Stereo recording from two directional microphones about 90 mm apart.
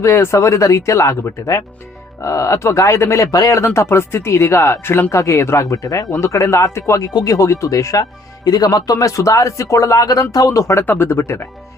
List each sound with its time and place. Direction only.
0.0 s speech: 30° left (ahead or behind)
7.1 s speech: 50° left (ahead or behind)
7.3 s speech: 35° left (ahead or behind)
10.8 s speech: 25° left (ahead or behind)